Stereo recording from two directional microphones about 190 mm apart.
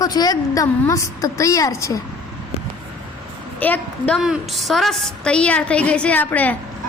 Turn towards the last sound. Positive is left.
turn(degrees=10)  # may be behind; listen again after turning